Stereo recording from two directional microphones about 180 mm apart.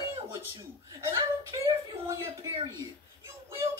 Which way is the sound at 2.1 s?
20° right (ahead or behind).